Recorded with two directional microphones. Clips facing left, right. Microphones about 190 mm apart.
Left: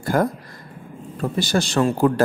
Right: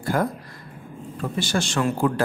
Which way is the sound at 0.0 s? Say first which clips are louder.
Left 3 dB; 45° left (ahead or behind).